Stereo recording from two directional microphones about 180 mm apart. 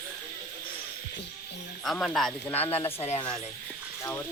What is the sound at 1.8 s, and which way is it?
Speech, centre (ahead or behind).